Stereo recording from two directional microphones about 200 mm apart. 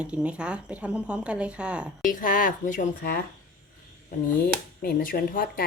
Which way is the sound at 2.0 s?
40° left (ahead or behind).